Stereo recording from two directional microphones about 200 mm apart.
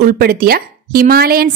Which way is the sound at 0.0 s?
45° right (ahead or behind).